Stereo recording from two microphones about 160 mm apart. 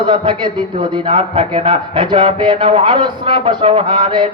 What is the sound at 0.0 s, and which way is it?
A man's voice, 30° right (ahead or behind).